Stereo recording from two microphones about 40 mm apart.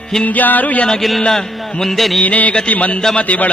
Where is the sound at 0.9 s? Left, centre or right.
Centre.